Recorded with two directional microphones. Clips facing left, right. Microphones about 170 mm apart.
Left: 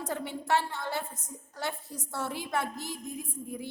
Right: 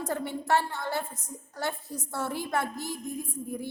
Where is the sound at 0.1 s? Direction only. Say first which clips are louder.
Right 2 dB; 50° right (ahead or behind).